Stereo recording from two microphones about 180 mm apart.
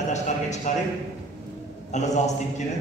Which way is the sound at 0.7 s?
45° left (ahead or behind).